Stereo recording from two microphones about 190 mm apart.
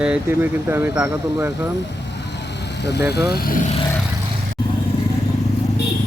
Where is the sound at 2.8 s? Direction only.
60° left (ahead or behind).